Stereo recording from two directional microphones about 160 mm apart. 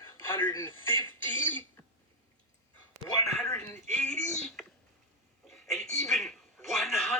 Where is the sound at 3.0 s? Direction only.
20° left (ahead or behind).